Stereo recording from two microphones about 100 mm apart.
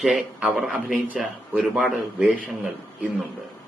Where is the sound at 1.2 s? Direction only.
5° right (ahead or behind).